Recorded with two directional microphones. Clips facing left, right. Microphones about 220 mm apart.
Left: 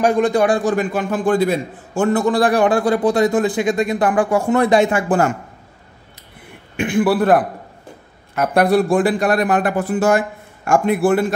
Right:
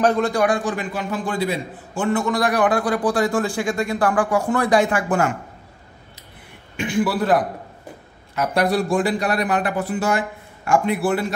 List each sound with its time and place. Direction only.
0.0 s a man's voice: 15° left (ahead or behind)
0.7 s a man's voice: 45° left (ahead or behind); by 5.2 s 25° left (ahead or behind)
6.8 s a man's voice: 55° left (ahead or behind)
8.4 s speech: 55° left (ahead or behind)